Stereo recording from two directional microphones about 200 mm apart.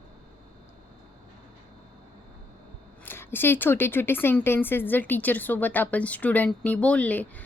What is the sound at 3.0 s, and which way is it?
Speech, 10° left (ahead or behind).